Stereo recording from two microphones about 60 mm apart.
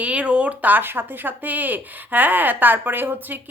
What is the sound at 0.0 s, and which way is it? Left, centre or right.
Speech, right.